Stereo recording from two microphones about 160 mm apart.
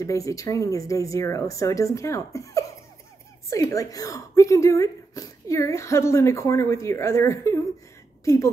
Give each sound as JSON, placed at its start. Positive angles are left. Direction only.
{"t": 0.0, "sound": "a woman's voice", "side_deg": 20}